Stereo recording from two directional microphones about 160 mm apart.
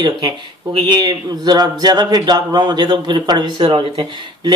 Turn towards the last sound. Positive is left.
turn(degrees=-30)  # may be behind; listen again after turning